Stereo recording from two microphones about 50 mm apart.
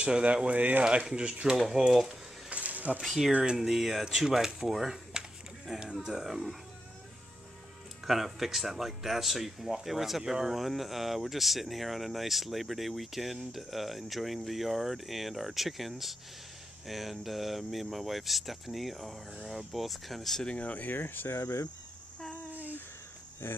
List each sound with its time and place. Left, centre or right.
0.0 s speech: right
1.7 s speech: centre
2.5 s a sound: right
3.0 s speech: centre
8.0 s speech: centre
20.4 s speech: left
21.4 s fowl: left
23.4 s fowl: left